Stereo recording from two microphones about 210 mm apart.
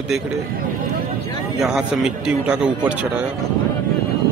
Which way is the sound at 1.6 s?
Centre (ahead or behind).